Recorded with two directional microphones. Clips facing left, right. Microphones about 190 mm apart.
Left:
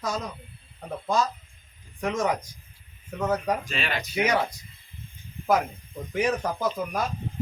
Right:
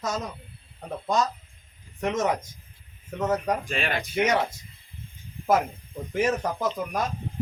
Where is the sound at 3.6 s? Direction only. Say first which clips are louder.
Right 2 dB; 50° right (ahead or behind).